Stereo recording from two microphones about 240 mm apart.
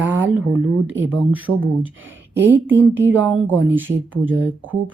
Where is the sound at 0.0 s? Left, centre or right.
Centre.